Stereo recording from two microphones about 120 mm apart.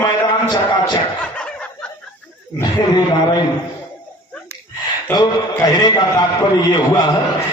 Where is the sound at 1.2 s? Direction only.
10° left (ahead or behind).